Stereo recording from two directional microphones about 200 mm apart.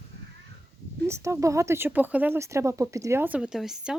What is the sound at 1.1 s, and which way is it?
Speech, 15° right (ahead or behind).